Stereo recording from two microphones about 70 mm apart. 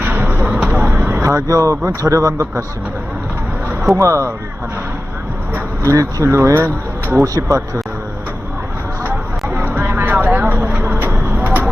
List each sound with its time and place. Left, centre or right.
0.0 s a sound: right
1.2 s speech: right
3.9 s speech: right
5.8 s speech: right
7.3 s speech: right
9.6 s music: right
10.3 s vehicle: right